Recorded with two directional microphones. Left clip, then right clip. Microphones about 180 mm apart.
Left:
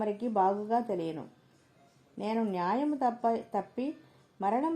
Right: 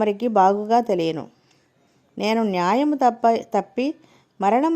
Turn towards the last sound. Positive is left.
turn(degrees=-35)  # may be behind; listen again after turning